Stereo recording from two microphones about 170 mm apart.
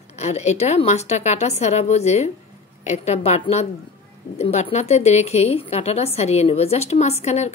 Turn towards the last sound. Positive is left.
turn(degrees=40)  # may be behind; listen again after turning